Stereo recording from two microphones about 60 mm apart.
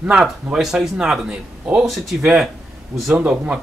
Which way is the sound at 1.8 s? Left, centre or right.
Centre.